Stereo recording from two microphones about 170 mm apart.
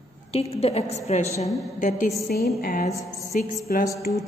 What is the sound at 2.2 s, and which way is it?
Speech, 65° left (ahead or behind).